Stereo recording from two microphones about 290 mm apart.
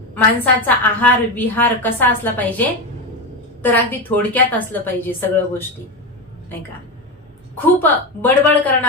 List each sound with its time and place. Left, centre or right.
0.1 s a woman's voice: centre
7.5 s a woman's voice: centre